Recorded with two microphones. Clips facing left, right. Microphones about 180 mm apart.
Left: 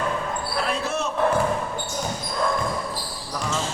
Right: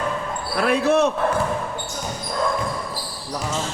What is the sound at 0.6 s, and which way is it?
Speech, 60° right (ahead or behind).